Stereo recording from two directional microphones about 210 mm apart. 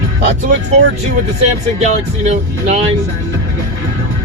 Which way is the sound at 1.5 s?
35° right (ahead or behind).